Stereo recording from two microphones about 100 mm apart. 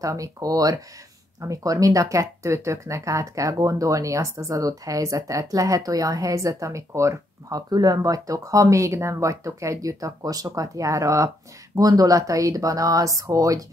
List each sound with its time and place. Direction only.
0.0 s speech: 35° right (ahead or behind)